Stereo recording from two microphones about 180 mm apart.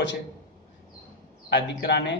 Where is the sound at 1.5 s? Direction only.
75° left (ahead or behind).